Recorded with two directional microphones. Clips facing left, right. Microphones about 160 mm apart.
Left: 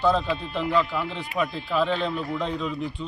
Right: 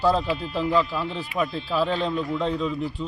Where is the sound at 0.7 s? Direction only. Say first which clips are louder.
Even; 35° right (ahead or behind).